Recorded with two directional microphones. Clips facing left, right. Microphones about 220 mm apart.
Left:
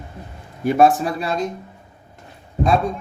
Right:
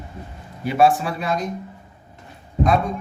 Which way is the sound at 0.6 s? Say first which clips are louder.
Left 2 dB; 45° left (ahead or behind).